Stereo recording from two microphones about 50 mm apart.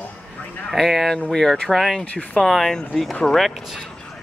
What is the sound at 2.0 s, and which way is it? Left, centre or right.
Speech, left.